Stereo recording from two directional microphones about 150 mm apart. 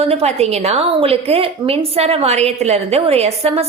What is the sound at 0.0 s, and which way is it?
A woman's voice, 45° right (ahead or behind).